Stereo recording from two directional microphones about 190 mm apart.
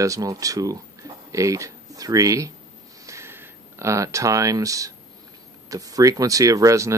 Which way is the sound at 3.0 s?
15° right (ahead or behind).